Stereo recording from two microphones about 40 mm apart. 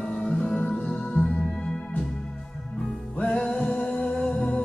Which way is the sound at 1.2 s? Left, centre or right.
Left.